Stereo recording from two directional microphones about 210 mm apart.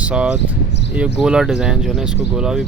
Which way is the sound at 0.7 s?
55° left (ahead or behind).